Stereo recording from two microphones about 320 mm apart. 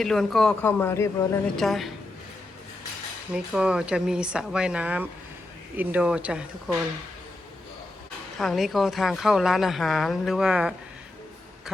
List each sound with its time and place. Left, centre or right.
0.0 s speech: centre
3.3 s speech: centre
8.4 s speech: centre